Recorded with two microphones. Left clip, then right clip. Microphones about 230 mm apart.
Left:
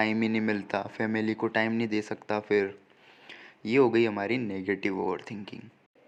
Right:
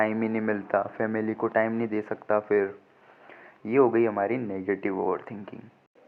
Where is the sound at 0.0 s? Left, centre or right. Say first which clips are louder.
Right 2 dB; left.